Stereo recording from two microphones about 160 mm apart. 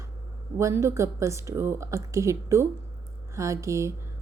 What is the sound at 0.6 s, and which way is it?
A woman's voice, 20° right (ahead or behind).